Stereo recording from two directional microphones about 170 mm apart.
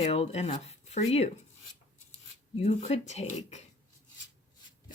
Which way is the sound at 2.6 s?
40° left (ahead or behind).